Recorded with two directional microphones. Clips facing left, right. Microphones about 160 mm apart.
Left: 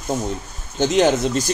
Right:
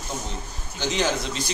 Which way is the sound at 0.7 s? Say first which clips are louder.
Left 9 dB; 50° left (ahead or behind).